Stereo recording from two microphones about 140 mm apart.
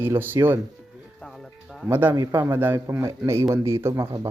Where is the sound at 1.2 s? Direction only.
Centre (ahead or behind).